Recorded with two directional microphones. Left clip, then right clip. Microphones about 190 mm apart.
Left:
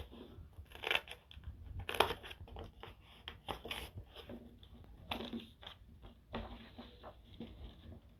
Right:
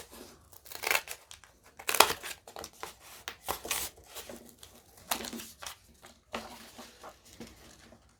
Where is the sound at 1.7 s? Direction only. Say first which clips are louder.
Right 9 dB; 45° right (ahead or behind).